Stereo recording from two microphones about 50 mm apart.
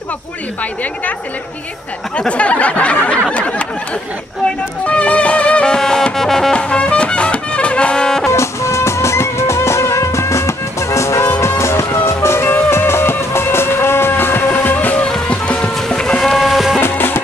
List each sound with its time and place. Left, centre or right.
2.1 s a sound: left
4.8 s music: left
5.8 s brass instrument: centre
6.1 s music: centre
6.5 s music: left
8.3 s music: left
15.0 s music: centre
16.3 s music: centre
16.8 s music: left